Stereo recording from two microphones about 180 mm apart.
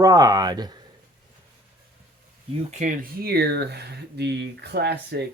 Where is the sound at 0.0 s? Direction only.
20° right (ahead or behind).